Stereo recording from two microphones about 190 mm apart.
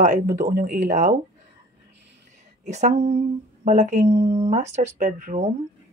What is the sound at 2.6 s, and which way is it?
Speech, 35° right (ahead or behind).